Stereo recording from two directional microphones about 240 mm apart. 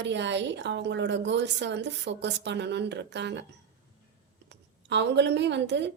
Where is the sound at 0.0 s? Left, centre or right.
Right.